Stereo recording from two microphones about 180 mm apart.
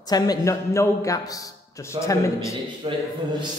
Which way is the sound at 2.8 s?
30° right (ahead or behind).